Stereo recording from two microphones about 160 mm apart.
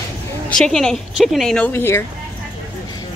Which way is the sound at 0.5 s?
5° left (ahead or behind).